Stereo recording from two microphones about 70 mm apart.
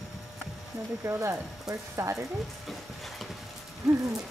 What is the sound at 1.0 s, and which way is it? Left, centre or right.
Speech, right.